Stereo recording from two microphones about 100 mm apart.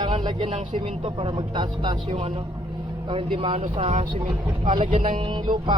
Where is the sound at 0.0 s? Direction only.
50° right (ahead or behind).